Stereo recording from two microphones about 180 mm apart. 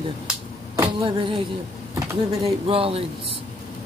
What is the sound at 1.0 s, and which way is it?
Speech, 30° right (ahead or behind).